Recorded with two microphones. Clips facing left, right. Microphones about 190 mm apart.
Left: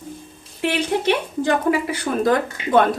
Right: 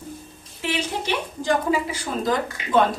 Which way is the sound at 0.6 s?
60° left (ahead or behind).